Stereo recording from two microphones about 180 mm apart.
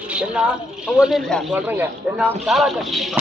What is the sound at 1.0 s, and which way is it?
Speech, centre (ahead or behind).